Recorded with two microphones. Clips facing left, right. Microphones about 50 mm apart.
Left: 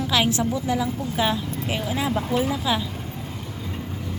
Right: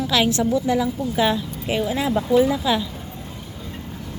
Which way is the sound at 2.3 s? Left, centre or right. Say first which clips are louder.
Right 9 dB; left.